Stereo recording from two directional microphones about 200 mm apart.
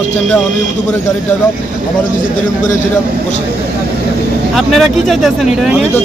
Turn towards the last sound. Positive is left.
turn(degrees=-5)  # may be behind; listen again after turning